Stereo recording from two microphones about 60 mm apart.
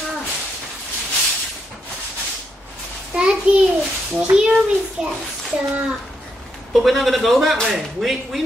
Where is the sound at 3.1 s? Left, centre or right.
Right.